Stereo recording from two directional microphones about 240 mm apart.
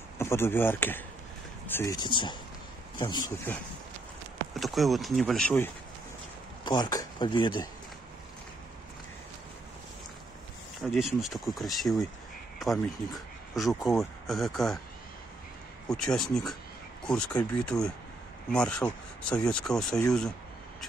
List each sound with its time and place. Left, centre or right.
0.2 s speech: centre
4.6 s speech: centre
6.6 s speech: centre
10.8 s speech: centre
13.1 s speech: centre
15.9 s speech: centre